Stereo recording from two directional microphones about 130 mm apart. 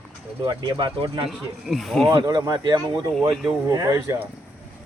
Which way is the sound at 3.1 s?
Centre (ahead or behind).